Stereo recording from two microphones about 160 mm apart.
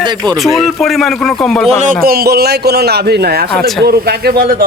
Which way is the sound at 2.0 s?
70° right (ahead or behind).